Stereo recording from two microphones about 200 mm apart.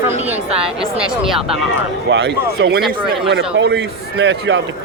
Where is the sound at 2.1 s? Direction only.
60° right (ahead or behind).